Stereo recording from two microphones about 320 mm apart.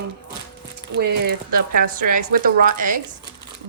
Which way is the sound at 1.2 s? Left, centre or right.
Right.